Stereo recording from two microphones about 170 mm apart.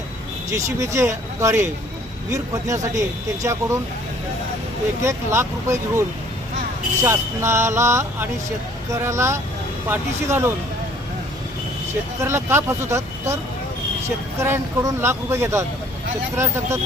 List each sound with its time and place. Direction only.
0.5 s speech: 15° right (ahead or behind)
5.0 s speech: 15° right (ahead or behind)
12.2 s speech: 15° right (ahead or behind)